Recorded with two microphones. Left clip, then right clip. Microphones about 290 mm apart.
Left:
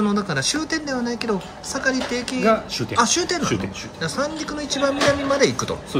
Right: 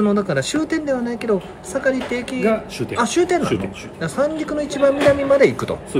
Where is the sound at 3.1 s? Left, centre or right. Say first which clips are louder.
Right 4 dB; centre.